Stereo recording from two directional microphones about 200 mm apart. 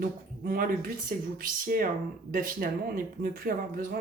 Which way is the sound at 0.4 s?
45° right (ahead or behind).